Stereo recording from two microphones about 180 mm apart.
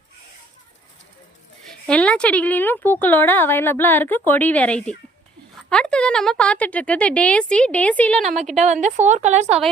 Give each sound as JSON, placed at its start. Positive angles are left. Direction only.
{"t": 1.9, "sound": "speech", "side_deg": 5}
{"t": 8.2, "sound": "a woman's voice", "side_deg": -40}